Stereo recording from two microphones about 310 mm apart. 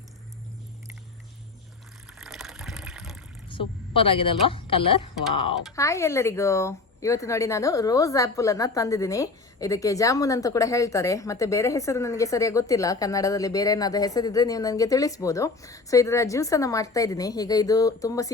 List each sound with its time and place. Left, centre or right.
2.1 s water: centre
3.5 s a woman's voice: centre